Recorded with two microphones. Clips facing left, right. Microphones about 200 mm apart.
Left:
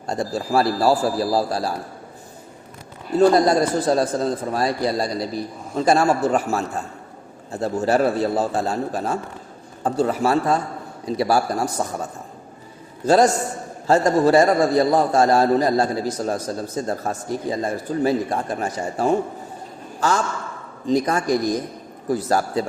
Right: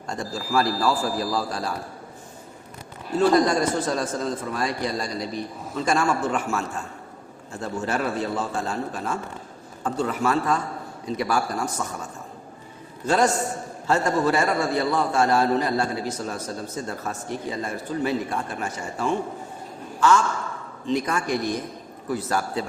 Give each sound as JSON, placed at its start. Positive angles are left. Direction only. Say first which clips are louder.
{"t": 0.1, "sound": "a man's voice", "louder": "left 5 dB", "side_deg": 35}
{"t": 3.2, "sound": "a man's voice", "louder": "left 4 dB", "side_deg": 35}
{"t": 13.1, "sound": "a man's voice", "louder": "left 5 dB", "side_deg": 35}